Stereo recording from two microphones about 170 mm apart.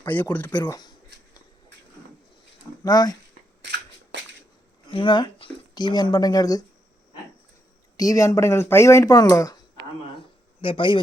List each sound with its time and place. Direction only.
0.0 s speech: 10° left (ahead or behind)
0.6 s a sound: 25° left (ahead or behind)
2.8 s speech: 20° left (ahead or behind)
3.6 s a sound: 90° right
4.9 s speech: 30° left (ahead or behind)
7.9 s speech: 20° left (ahead or behind)
10.6 s speech: 30° left (ahead or behind)